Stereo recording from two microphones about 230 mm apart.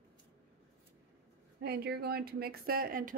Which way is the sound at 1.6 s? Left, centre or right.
Right.